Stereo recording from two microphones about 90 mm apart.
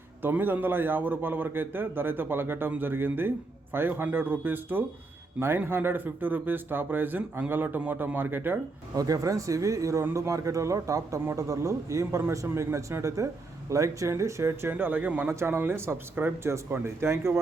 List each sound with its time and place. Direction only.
0.2 s a man's voice: 20° right (ahead or behind)
9.0 s a man's voice: 40° right (ahead or behind)